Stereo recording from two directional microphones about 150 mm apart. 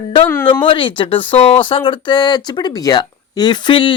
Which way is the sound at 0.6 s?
35° left (ahead or behind).